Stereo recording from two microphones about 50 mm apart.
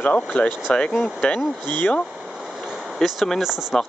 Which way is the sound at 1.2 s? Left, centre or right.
Left.